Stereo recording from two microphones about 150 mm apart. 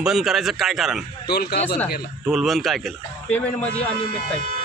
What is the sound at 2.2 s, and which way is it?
Speech, centre (ahead or behind).